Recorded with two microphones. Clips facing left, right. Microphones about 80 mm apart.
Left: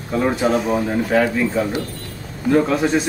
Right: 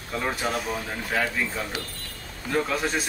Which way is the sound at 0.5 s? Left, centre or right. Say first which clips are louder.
Left 10 dB; left.